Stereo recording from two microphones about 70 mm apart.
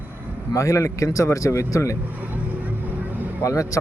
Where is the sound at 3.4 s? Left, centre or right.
Left.